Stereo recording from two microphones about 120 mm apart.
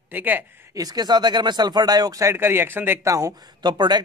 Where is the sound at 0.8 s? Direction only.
35° right (ahead or behind).